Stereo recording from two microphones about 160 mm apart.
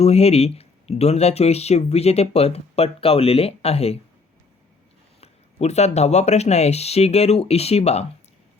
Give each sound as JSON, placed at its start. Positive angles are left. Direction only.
{"t": 0.0, "sound": "speech", "side_deg": 40}
{"t": 5.2, "sound": "speech", "side_deg": 40}